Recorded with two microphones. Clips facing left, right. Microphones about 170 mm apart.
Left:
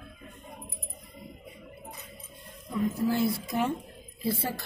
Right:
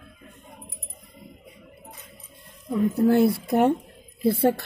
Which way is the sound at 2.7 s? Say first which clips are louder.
Right 8 dB; 60° right (ahead or behind).